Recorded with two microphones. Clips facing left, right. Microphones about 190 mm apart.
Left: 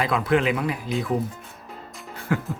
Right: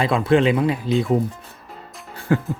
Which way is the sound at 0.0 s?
30° right (ahead or behind).